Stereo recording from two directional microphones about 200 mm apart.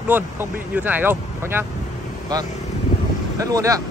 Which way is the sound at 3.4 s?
15° right (ahead or behind).